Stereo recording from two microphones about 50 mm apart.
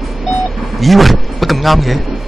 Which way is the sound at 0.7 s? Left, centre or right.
Centre.